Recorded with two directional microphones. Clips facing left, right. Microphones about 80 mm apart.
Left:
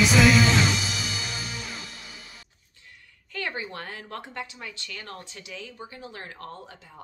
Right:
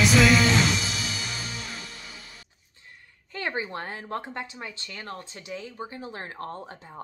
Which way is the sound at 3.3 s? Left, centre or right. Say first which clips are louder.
Right 2 dB; right.